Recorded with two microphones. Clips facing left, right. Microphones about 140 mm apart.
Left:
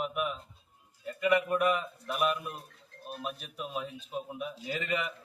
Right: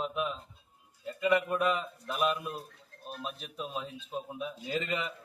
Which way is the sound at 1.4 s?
5° right (ahead or behind).